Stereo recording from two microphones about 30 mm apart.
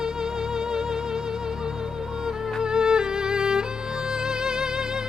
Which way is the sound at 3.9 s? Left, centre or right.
Centre.